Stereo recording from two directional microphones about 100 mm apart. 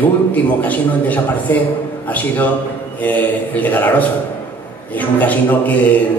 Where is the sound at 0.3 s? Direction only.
15° left (ahead or behind).